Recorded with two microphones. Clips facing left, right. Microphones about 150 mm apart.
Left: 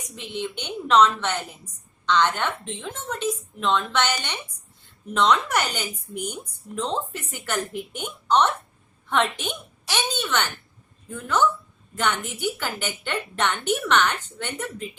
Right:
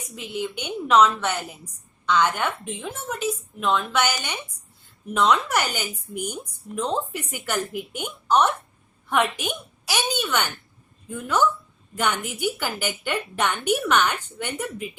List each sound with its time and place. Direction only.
0.2 s a woman's voice: 10° right (ahead or behind)